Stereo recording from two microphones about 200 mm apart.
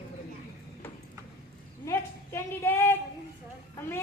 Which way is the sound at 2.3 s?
10° left (ahead or behind).